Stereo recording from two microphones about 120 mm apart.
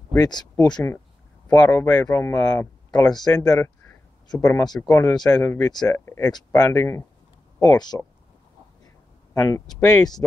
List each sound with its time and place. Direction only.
0.1 s speech: 35° left (ahead or behind)
1.5 s a man's voice: 25° left (ahead or behind)
5.7 s speech: 35° left (ahead or behind)
5.9 s a man's voice: 20° left (ahead or behind)
7.6 s speech: 35° left (ahead or behind)
8.8 s a sound: 30° left (ahead or behind)
9.8 s speech: 35° left (ahead or behind)